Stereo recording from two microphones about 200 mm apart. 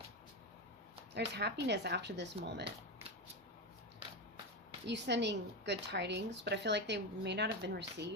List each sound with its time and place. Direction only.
1.1 s a woman's voice: 55° right (ahead or behind)
4.9 s a woman's voice: 60° right (ahead or behind)